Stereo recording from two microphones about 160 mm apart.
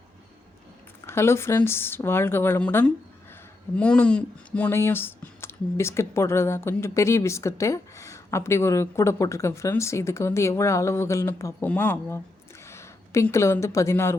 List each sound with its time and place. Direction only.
1.0 s speech: 15° left (ahead or behind)